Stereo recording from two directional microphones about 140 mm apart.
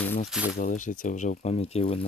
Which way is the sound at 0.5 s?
65° left (ahead or behind).